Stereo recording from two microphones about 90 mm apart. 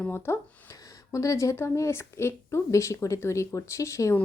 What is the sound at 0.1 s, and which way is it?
Speech, 25° left (ahead or behind).